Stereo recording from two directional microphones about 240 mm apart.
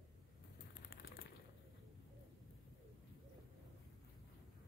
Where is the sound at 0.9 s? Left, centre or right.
Left.